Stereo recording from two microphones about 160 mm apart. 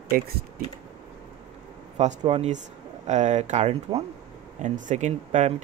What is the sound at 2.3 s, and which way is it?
Speech, 40° right (ahead or behind).